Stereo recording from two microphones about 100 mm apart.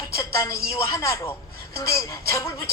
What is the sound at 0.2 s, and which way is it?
A woman's voice, 30° left (ahead or behind).